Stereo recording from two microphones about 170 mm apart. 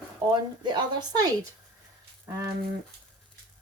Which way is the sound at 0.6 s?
25° right (ahead or behind).